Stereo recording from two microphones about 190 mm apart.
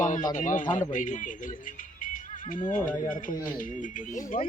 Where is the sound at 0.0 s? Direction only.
40° left (ahead or behind).